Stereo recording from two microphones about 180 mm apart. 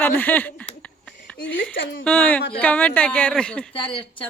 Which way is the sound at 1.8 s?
90° left.